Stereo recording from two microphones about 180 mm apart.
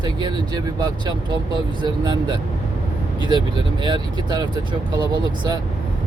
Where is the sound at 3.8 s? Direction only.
25° right (ahead or behind).